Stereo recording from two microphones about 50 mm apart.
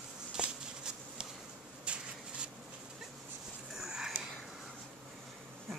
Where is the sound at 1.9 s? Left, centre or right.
Right.